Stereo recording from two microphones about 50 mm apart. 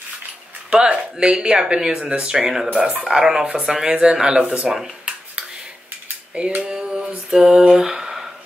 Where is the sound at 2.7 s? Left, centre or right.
Centre.